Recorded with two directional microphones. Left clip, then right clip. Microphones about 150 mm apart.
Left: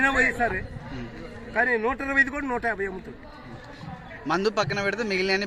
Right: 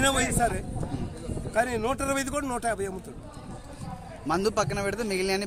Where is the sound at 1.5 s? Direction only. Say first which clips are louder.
Left 3 dB; 20° right (ahead or behind).